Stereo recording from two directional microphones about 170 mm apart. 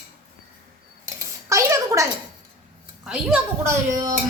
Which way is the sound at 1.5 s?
20° right (ahead or behind).